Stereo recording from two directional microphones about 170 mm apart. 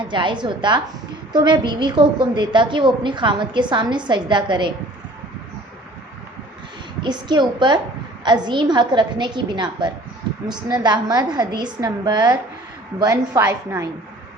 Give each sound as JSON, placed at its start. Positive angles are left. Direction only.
{"t": 0.0, "sound": "a woman's voice", "side_deg": -25}
{"t": 7.0, "sound": "a woman's voice", "side_deg": -25}